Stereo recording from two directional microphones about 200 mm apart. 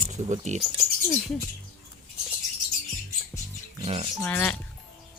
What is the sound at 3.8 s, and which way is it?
Speech, 30° right (ahead or behind).